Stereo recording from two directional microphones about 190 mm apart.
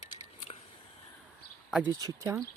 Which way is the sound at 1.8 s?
20° right (ahead or behind).